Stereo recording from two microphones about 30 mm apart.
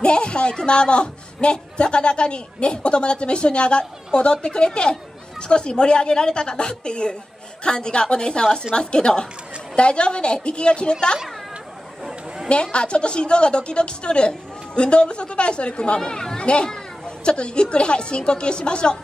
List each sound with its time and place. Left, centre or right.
0.0 s a man's voice: left
12.0 s chatter: centre
12.7 s a man's voice: left